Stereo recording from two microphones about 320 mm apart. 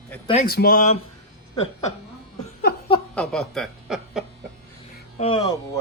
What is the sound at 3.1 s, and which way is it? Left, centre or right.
Speech, centre.